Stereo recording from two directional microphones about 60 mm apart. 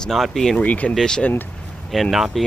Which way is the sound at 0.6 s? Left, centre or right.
Left.